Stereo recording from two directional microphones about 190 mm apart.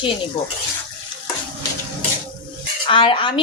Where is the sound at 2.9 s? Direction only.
25° left (ahead or behind).